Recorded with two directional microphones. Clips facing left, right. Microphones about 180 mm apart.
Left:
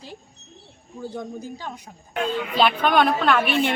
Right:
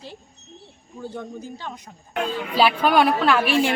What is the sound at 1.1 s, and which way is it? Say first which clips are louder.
Speech: left 2 dB; 10° left (ahead or behind).